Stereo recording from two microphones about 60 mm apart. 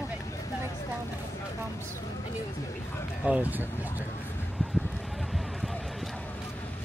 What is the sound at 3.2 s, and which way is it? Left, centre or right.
Speech, right.